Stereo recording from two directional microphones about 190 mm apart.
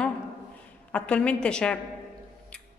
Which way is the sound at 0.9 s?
5° left (ahead or behind).